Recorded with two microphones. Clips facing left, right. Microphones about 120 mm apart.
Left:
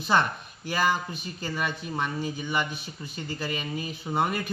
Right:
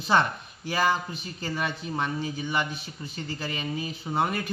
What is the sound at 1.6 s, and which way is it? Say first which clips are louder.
Speech: even; centre (ahead or behind).